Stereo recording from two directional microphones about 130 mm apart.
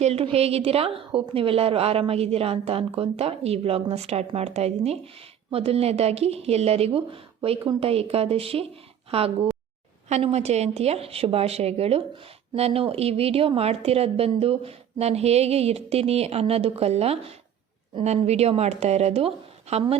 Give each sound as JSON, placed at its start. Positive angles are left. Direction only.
{"t": 0.0, "sound": "a woman's voice", "side_deg": -50}